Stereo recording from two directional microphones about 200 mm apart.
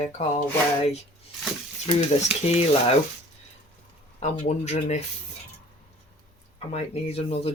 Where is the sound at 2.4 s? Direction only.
30° left (ahead or behind).